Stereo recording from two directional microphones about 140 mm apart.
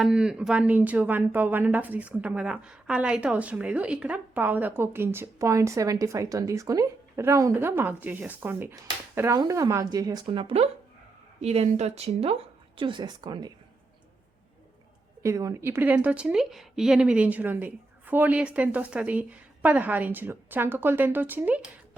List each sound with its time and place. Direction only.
0.0 s a woman's voice: 5° right (ahead or behind); by 13.5 s 30° right (ahead or behind)
15.2 s speech: 20° right (ahead or behind)